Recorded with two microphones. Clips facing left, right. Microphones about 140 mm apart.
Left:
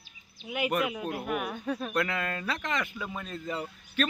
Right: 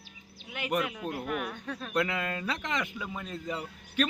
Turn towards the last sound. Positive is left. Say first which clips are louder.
# even
turn(degrees=-15)  # may be behind; listen again after turning